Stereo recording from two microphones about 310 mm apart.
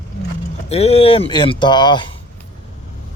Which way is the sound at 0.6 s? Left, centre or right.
Centre.